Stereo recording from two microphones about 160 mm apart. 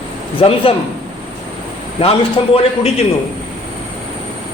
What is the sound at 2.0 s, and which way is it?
Speech, 35° left (ahead or behind).